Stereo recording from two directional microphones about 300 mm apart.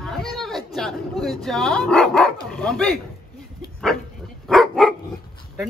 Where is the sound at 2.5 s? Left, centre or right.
Centre.